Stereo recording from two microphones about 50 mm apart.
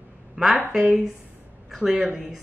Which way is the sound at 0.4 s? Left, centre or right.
Centre.